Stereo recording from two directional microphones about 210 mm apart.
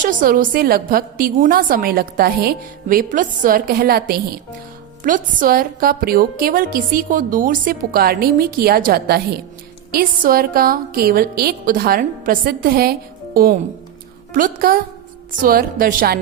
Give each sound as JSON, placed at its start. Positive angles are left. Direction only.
{"t": 0.0, "sound": "a woman's voice", "side_deg": -40}